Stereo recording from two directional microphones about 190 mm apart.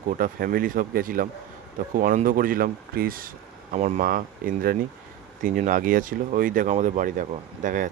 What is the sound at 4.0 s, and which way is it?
Speech, 50° right (ahead or behind).